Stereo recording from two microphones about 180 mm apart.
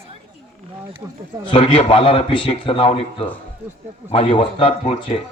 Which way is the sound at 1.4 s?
30° left (ahead or behind).